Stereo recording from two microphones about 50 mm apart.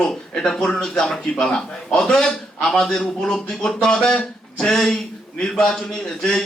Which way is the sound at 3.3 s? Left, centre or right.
Centre.